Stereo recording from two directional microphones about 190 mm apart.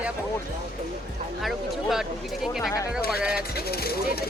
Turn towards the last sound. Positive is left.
turn(degrees=55)  # may be behind; listen again after turning